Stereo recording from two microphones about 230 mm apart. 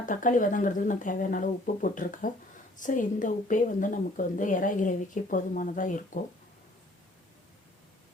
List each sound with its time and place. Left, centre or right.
0.0 s a woman's voice: left